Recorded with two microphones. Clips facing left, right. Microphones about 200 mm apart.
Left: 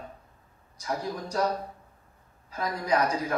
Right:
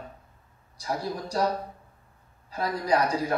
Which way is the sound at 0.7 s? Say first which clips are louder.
Right 1 dB; 35° right (ahead or behind).